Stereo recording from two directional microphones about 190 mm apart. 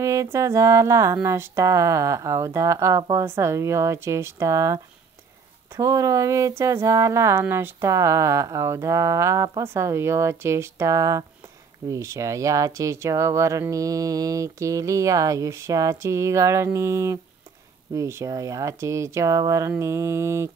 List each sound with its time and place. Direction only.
0.0 s speech: 15° right (ahead or behind)